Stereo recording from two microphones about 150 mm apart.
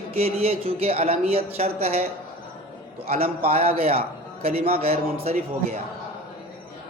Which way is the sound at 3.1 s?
45° right (ahead or behind).